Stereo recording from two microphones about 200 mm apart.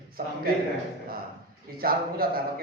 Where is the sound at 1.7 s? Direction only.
50° right (ahead or behind).